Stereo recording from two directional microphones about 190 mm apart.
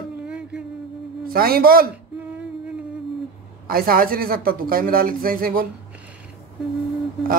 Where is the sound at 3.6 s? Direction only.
50° right (ahead or behind).